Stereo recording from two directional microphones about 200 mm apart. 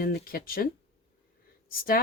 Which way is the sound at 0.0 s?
45° left (ahead or behind).